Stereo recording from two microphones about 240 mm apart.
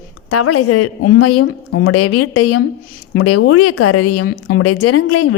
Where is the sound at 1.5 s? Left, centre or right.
Left.